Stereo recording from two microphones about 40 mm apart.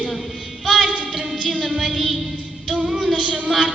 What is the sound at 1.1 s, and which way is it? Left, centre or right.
Music, right.